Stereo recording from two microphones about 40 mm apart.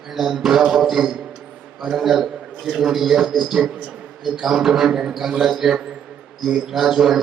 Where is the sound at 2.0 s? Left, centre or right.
Centre.